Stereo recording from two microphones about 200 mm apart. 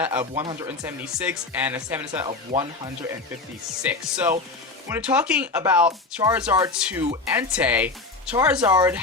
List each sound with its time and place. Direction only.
0.0 s speech: 10° right (ahead or behind)
1.0 s speech: 5° right (ahead or behind)
2.2 s speech: 20° right (ahead or behind)
3.8 s speech: 5° right (ahead or behind)